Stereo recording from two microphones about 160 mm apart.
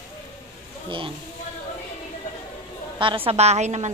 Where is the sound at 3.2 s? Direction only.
40° right (ahead or behind).